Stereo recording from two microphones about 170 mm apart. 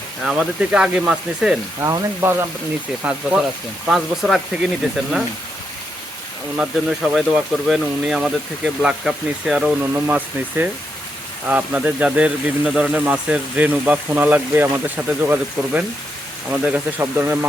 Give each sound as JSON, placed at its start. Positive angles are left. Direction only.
{"t": 0.2, "sound": "speech", "side_deg": -5}
{"t": 1.8, "sound": "speech", "side_deg": -15}
{"t": 6.6, "sound": "speech", "side_deg": -5}